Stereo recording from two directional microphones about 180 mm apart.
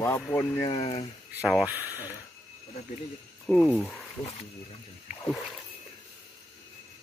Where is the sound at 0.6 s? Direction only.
30° left (ahead or behind).